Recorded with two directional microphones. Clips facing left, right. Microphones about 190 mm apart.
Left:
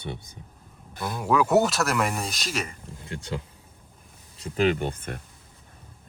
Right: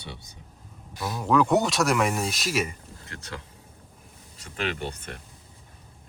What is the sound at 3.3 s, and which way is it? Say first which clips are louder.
Speech: left 6 dB; 25° left (ahead or behind).